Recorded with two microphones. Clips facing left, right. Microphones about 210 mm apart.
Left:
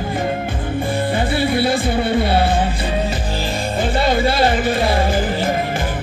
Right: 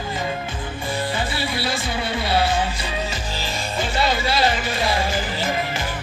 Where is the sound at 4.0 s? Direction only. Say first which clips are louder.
Left 5 dB; 55° left (ahead or behind).